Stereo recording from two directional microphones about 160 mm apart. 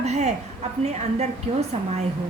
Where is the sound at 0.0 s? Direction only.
45° right (ahead or behind).